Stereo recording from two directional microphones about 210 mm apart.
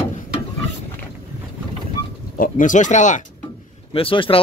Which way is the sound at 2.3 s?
40° left (ahead or behind).